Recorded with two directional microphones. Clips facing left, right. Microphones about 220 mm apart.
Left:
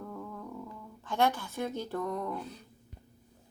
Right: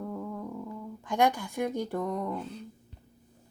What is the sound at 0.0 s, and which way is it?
Music, 15° right (ahead or behind).